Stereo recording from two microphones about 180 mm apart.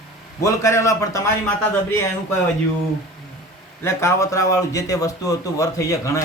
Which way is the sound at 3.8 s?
15° left (ahead or behind).